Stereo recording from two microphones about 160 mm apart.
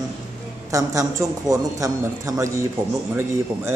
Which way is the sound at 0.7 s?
20° right (ahead or behind).